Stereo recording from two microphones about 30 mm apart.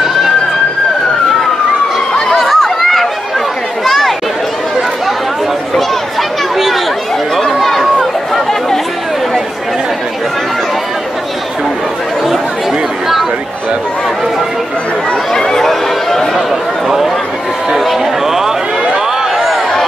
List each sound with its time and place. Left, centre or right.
0.0 s a sound: centre
2.3 s chatter: centre
6.5 s chatter: centre
15.3 s chatter: centre
16.8 s chatter: centre
18.2 s a sound: centre